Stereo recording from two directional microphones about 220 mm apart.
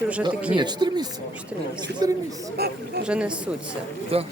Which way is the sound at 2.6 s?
45° right (ahead or behind).